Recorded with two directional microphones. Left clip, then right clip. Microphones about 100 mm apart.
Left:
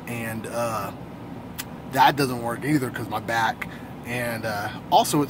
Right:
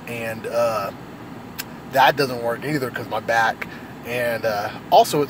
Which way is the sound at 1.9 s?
20° left (ahead or behind).